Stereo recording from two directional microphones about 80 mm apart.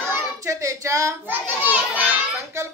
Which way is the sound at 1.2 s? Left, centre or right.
Right.